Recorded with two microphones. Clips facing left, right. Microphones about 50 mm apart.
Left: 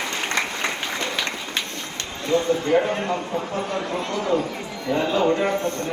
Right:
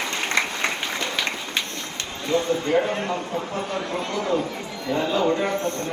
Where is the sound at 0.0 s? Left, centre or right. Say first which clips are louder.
Right 1 dB; centre.